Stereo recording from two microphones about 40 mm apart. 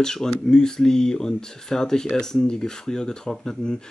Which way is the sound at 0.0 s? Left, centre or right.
Centre.